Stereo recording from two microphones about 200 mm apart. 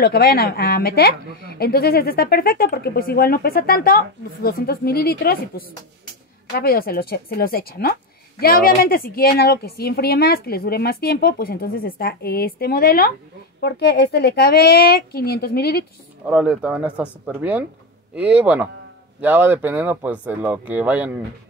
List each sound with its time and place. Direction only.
0.0 s a woman's voice: 50° left (ahead or behind)
16.3 s speech: 5° right (ahead or behind)